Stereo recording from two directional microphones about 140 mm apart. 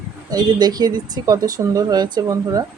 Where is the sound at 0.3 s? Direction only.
30° right (ahead or behind).